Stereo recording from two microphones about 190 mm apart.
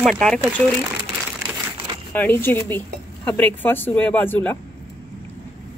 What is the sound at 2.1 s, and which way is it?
Speech, 10° left (ahead or behind).